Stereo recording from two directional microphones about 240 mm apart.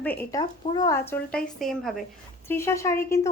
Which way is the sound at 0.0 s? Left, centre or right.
Centre.